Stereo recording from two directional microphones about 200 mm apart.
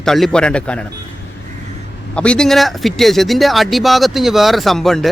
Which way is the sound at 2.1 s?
5° left (ahead or behind).